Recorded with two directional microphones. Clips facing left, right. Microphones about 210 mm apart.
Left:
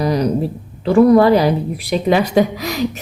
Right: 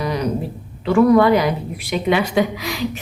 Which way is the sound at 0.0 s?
35° left (ahead or behind).